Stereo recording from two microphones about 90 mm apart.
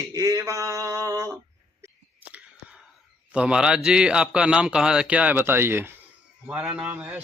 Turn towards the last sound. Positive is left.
turn(degrees=-20)  # may be behind; listen again after turning